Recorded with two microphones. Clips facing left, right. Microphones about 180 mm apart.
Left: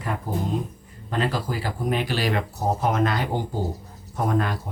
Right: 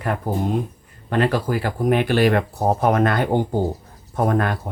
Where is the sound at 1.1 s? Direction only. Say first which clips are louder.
Right 6 dB; 60° right (ahead or behind).